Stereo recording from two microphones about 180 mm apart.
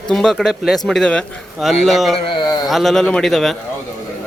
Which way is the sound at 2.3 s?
25° left (ahead or behind).